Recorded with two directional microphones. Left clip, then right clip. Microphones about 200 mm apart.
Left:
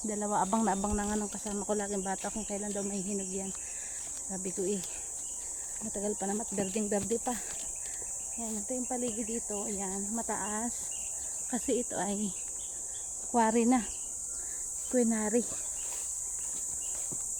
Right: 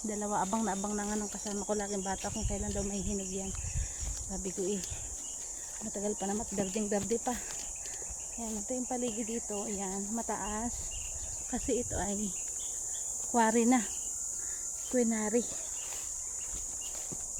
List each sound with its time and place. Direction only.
0.1 s speech: 15° left (ahead or behind)
0.5 s speech: 30° left (ahead or behind); by 3.4 s 10° left (ahead or behind)
6.0 s speech: 10° left (ahead or behind)
8.4 s speech: centre (ahead or behind)
11.5 s speech: 20° left (ahead or behind)
13.3 s speech: 15° left (ahead or behind)
14.9 s speech: 20° left (ahead or behind)